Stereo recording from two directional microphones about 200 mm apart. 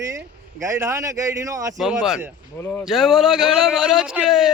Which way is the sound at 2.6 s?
10° left (ahead or behind).